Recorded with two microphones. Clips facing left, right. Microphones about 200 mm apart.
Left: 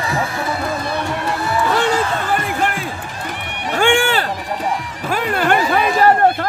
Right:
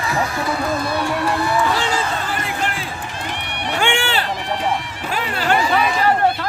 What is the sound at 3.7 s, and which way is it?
Speech, 45° left (ahead or behind).